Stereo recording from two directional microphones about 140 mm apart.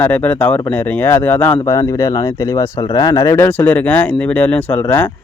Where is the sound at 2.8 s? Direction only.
30° left (ahead or behind); by 4.8 s 10° left (ahead or behind).